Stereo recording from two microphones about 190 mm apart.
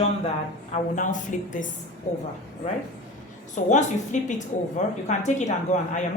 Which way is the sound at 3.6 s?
40° left (ahead or behind).